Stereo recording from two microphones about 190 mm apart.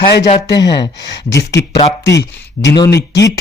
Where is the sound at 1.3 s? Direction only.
65° left (ahead or behind).